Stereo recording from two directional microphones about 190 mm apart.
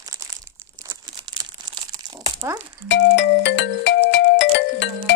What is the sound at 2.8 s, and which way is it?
Music, 70° left (ahead or behind).